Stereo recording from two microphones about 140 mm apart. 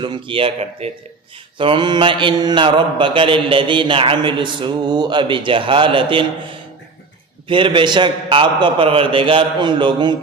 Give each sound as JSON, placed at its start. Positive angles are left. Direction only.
{"t": 0.0, "sound": "mantra", "side_deg": -35}
{"t": 7.4, "sound": "mantra", "side_deg": -35}